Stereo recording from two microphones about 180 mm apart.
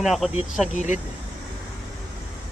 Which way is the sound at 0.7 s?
45° left (ahead or behind).